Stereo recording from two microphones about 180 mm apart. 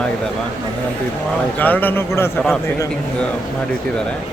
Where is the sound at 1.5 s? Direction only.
10° left (ahead or behind).